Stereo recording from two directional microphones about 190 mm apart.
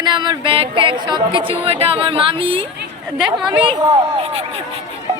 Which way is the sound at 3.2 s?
5° right (ahead or behind).